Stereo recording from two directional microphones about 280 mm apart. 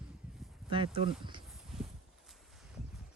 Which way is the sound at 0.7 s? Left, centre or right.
Centre.